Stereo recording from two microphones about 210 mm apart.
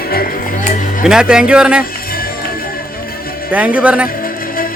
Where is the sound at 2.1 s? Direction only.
45° left (ahead or behind).